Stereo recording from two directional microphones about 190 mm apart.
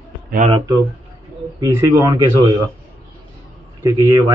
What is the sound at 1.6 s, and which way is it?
Speech, 15° right (ahead or behind).